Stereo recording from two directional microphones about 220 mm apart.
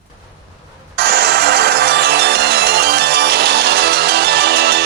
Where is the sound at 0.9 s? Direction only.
45° right (ahead or behind).